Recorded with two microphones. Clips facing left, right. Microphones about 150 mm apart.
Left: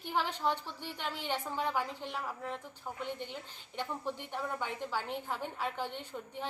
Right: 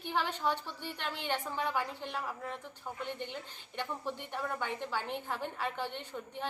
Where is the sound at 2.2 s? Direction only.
10° right (ahead or behind).